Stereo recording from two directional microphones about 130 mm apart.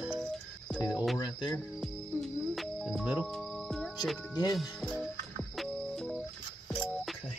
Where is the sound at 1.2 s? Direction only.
35° left (ahead or behind).